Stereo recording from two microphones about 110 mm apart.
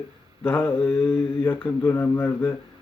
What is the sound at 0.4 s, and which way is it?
Speech, 20° left (ahead or behind).